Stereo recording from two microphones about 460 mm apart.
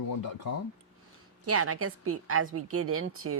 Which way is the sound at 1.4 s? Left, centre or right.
Right.